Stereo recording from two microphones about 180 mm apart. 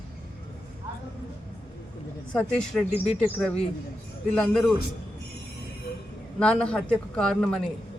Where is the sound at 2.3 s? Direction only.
5° left (ahead or behind).